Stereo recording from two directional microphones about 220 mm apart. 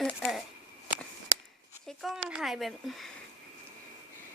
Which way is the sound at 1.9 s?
Centre (ahead or behind).